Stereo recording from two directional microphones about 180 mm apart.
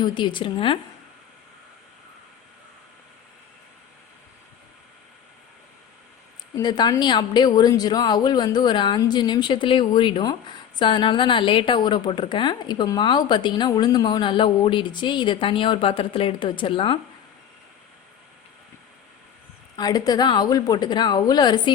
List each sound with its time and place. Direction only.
0.1 s a woman's voice: 25° left (ahead or behind)
6.6 s a woman's voice: 25° left (ahead or behind)
19.7 s a woman's voice: 20° left (ahead or behind)